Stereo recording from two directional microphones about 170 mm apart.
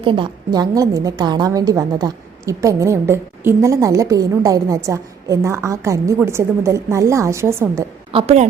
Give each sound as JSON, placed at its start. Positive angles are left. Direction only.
{"t": 0.0, "sound": "a woman's voice", "side_deg": -30}
{"t": 8.1, "sound": "a woman's voice", "side_deg": -35}